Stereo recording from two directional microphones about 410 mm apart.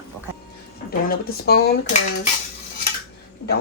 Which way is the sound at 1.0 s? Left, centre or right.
Left.